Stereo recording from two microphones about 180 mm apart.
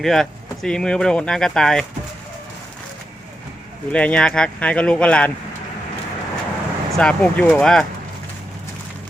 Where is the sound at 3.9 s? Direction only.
5° left (ahead or behind).